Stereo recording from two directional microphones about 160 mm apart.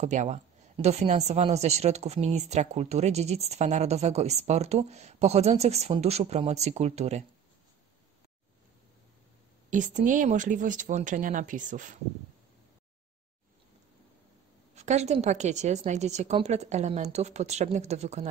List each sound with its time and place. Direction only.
0.0 s a woman's voice: 50° right (ahead or behind)
9.7 s a woman's voice: 55° right (ahead or behind)
14.8 s a woman's voice: 45° right (ahead or behind)